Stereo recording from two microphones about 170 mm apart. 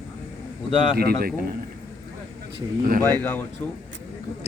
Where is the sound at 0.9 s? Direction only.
65° right (ahead or behind).